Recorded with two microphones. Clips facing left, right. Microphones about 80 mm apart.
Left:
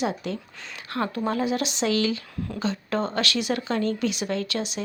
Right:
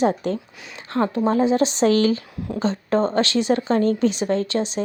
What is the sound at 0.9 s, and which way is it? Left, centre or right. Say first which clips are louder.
A woman's voice: right 6 dB; right.